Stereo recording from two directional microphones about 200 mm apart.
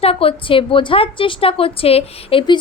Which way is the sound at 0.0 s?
30° left (ahead or behind).